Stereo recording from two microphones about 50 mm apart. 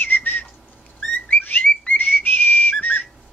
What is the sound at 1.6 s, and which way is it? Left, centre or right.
Whistle, left.